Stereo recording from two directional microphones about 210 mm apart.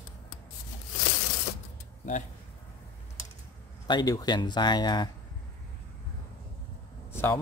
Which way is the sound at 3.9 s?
20° left (ahead or behind).